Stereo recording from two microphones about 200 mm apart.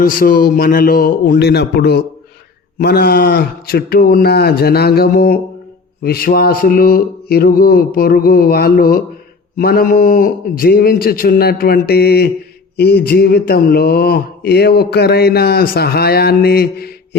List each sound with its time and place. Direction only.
0.0 s a man's voice: 45° left (ahead or behind)